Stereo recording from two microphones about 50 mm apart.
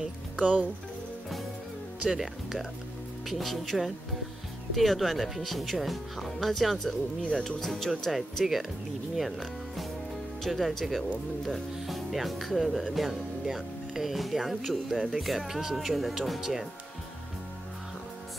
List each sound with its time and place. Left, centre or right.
0.4 s speech: right
2.0 s speech: centre